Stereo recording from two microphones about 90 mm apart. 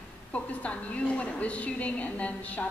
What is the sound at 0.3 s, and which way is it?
A woman's voice, 15° left (ahead or behind).